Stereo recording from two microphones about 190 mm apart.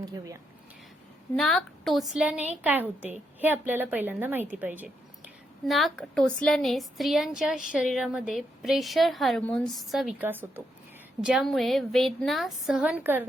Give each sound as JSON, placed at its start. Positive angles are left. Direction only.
{"t": 0.0, "sound": "speech", "side_deg": -20}
{"t": 1.4, "sound": "a woman's voice", "side_deg": 5}